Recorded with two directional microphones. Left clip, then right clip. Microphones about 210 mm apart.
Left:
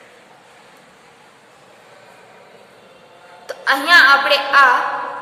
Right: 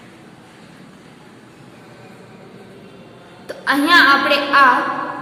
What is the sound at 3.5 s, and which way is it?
A woman's voice, 10° left (ahead or behind).